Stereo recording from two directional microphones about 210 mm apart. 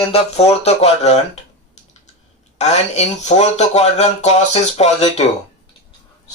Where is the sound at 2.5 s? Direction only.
30° left (ahead or behind).